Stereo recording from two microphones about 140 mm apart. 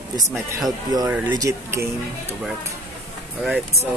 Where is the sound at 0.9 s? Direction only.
25° right (ahead or behind).